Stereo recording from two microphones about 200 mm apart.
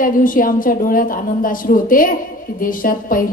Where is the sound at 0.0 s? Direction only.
45° left (ahead or behind).